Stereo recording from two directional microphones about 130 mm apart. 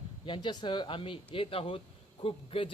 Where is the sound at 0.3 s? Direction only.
35° left (ahead or behind).